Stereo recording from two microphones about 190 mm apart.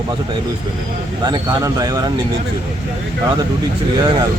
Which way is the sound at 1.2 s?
20° right (ahead or behind).